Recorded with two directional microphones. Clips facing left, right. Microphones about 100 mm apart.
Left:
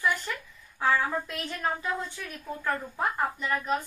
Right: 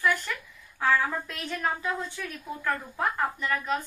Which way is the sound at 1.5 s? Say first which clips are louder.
Right 1 dB; 5° left (ahead or behind).